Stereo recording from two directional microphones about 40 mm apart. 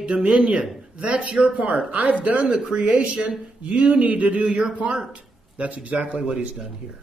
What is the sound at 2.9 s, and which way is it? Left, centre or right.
Speech, right.